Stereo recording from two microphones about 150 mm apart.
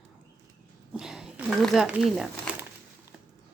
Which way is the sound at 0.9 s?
5° right (ahead or behind).